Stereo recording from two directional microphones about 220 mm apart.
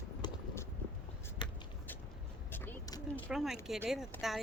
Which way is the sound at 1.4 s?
20° left (ahead or behind).